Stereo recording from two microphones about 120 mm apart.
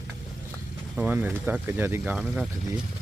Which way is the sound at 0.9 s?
15° right (ahead or behind).